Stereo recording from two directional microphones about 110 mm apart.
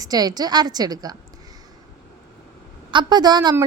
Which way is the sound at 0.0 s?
35° right (ahead or behind).